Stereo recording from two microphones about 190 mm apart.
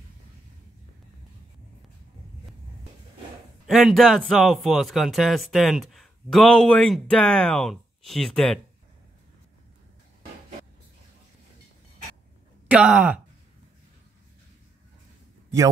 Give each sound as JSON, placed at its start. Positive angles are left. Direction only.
{"t": 3.6, "sound": "speech", "side_deg": 0}
{"t": 12.6, "sound": "speech", "side_deg": -5}